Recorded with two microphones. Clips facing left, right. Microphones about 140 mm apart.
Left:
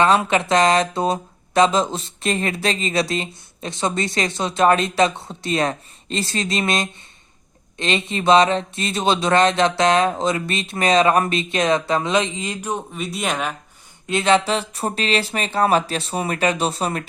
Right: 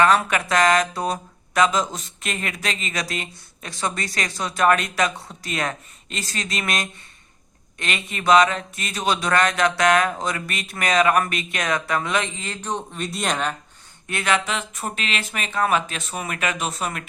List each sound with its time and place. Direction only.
0.0 s speech: 25° left (ahead or behind); by 13.6 s 5° left (ahead or behind)
14.1 s speech: 25° left (ahead or behind)